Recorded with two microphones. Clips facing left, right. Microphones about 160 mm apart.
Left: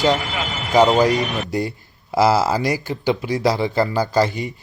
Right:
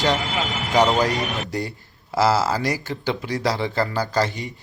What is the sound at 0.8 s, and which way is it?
A man's voice, 20° left (ahead or behind).